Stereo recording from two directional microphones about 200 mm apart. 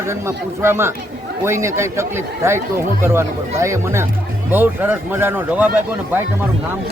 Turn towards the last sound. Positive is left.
turn(degrees=-10)  # may be behind; listen again after turning